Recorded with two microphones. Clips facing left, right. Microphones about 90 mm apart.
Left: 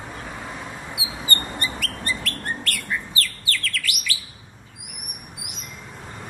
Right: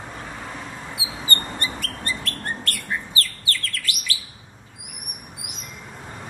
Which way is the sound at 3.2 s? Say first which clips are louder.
Left 1 dB; 35° right (ahead or behind).